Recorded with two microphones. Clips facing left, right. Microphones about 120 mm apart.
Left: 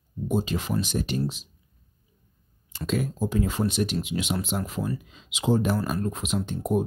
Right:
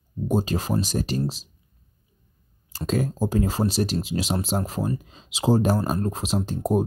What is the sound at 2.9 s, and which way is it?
Speech, 40° right (ahead or behind).